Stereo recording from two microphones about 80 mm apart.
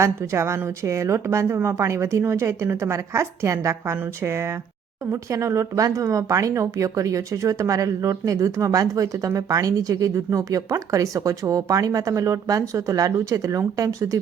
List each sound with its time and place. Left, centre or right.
0.0 s a woman's voice: right